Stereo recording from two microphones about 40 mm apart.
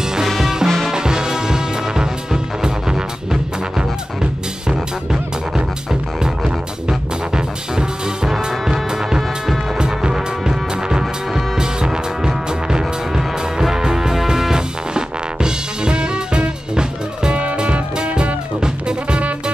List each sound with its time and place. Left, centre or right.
0.0 s music: centre
5.9 s music: centre